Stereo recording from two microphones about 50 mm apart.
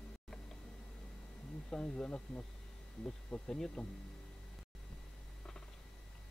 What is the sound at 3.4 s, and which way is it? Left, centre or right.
Speech, centre.